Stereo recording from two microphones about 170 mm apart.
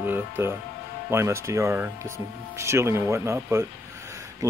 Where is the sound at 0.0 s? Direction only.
10° right (ahead or behind).